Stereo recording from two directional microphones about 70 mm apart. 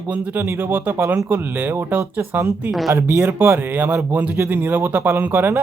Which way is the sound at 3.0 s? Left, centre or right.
Right.